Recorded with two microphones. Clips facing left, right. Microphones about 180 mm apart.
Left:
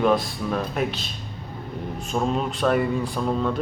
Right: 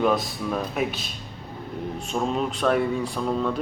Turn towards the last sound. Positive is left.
turn(degrees=0)  # may be behind; listen again after turning